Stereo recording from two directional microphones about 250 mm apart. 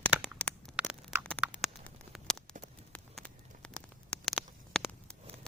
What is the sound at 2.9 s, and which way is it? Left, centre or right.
Patter, centre.